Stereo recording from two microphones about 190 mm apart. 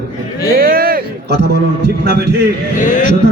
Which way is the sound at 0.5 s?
50° right (ahead or behind).